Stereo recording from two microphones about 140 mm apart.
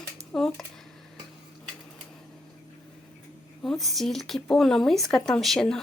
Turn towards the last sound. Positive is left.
turn(degrees=5)  # may be behind; listen again after turning